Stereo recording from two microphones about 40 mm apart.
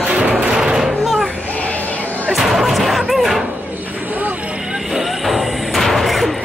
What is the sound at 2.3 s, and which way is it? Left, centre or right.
Music, centre.